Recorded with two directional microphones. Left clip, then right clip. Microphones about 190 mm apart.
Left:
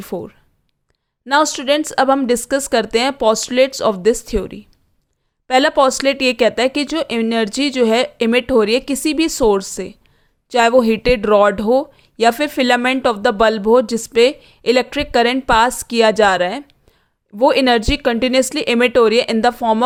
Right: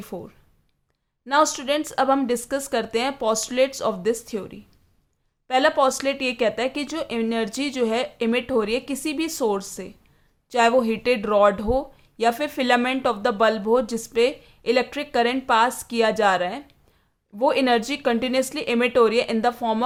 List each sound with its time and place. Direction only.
0.0 s speech: 35° left (ahead or behind)